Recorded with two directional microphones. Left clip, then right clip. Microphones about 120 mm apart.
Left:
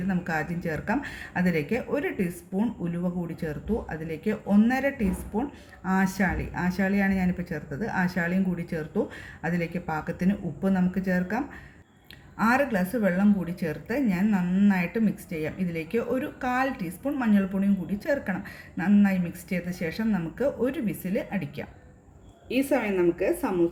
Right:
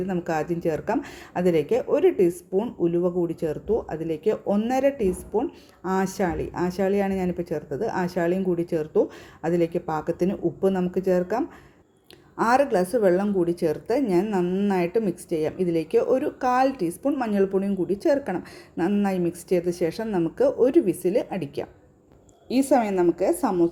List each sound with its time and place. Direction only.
0.1 s speech: 30° right (ahead or behind)
12.4 s speech: 50° right (ahead or behind)